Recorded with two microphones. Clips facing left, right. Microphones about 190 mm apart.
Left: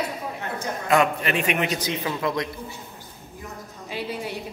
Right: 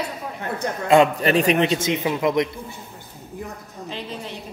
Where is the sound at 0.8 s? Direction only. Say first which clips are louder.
Right 5 dB; 35° right (ahead or behind); by 2.4 s 20° right (ahead or behind).